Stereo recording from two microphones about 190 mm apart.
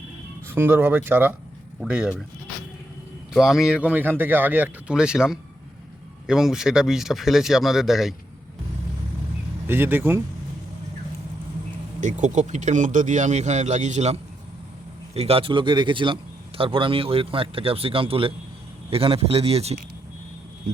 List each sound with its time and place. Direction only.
0.4 s speech: 10° right (ahead or behind)
3.3 s speech: centre (ahead or behind)
9.6 s speech: 10° right (ahead or behind)
11.9 s speech: 40° right (ahead or behind)